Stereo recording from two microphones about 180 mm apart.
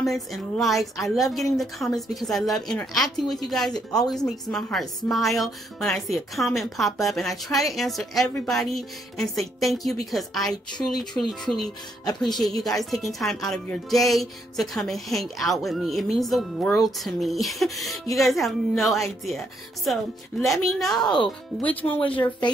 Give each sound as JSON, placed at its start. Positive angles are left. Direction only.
{"t": 0.0, "sound": "speech", "side_deg": 0}
{"t": 22.0, "sound": "speech", "side_deg": 25}